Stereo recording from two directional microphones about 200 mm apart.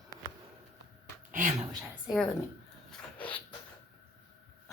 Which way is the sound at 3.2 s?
25° left (ahead or behind).